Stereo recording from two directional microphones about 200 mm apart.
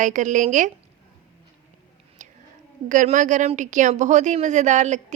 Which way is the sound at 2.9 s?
40° right (ahead or behind).